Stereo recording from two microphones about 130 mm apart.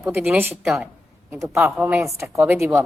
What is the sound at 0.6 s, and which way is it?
A woman's voice, 5° right (ahead or behind).